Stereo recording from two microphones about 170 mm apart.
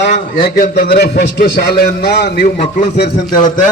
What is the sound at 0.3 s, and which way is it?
A man's voice, 50° left (ahead or behind).